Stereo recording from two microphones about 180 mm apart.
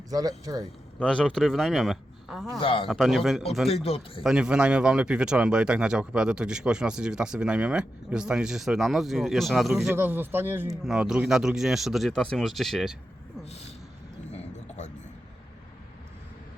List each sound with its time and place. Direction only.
0.1 s a man's voice: 20° right (ahead or behind)
0.9 s speech: 5° left (ahead or behind)
2.6 s speech: 30° left (ahead or behind)
2.8 s speech: centre (ahead or behind)
3.7 s speech: 35° left (ahead or behind)
4.2 s speech: 5° right (ahead or behind)
9.9 s speech: 10° right (ahead or behind)